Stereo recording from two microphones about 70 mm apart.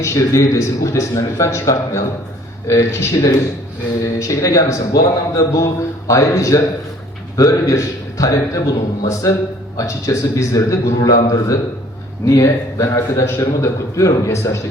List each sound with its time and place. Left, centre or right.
0.0 s a man's voice: left
4.0 s a man's voice: left